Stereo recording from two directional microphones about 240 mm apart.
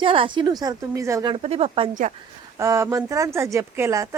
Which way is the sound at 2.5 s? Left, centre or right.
Centre.